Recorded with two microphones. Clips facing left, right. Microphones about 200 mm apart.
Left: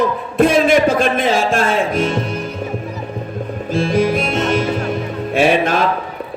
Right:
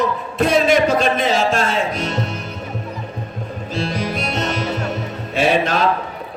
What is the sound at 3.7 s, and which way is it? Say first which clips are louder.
Music: left 8 dB; 50° left (ahead or behind).